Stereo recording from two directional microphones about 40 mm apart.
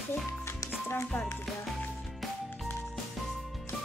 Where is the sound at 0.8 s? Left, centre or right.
Left.